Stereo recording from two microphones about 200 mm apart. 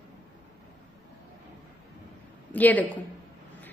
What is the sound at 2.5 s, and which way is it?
Speech, 10° left (ahead or behind).